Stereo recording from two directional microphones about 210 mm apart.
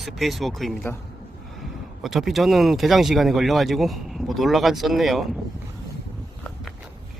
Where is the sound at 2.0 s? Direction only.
Centre (ahead or behind).